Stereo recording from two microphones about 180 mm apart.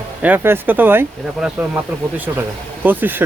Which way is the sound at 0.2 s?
10° right (ahead or behind).